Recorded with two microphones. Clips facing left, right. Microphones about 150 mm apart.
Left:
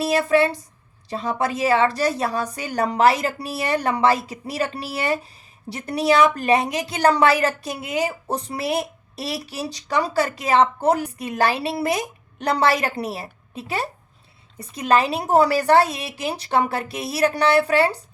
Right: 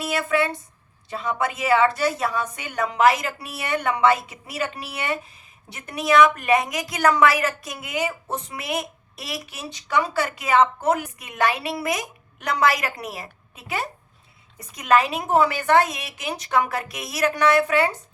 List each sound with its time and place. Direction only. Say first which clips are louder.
0.0 s a woman's voice: left 5 dB; 30° left (ahead or behind)